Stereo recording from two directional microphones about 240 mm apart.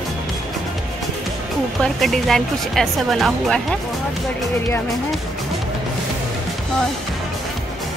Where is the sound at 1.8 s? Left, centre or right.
Centre.